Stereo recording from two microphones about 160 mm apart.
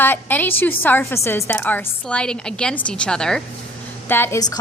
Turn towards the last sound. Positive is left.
turn(degrees=25)  # may be behind; listen again after turning